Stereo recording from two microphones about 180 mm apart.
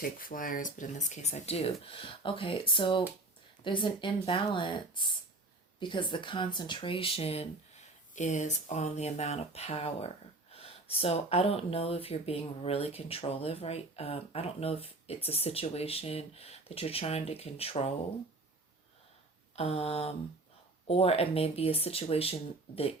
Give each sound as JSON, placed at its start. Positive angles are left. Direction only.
{"t": 0.0, "sound": "speech", "side_deg": 50}
{"t": 19.5, "sound": "speech", "side_deg": 35}